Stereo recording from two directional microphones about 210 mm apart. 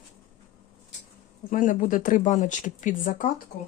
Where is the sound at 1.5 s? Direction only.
40° left (ahead or behind).